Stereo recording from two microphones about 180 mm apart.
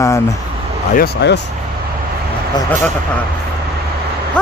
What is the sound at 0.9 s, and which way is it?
Speech, 65° left (ahead or behind).